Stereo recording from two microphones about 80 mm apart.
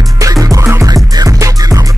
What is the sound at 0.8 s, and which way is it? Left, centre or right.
Music, right.